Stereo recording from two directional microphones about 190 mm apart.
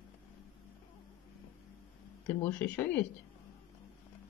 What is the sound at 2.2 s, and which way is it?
Speech, 10° left (ahead or behind).